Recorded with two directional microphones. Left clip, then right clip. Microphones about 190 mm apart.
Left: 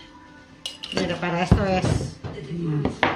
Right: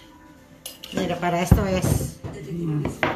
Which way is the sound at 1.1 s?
35° right (ahead or behind).